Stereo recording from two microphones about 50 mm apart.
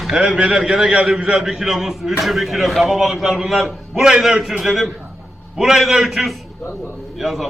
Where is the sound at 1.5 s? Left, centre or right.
Centre.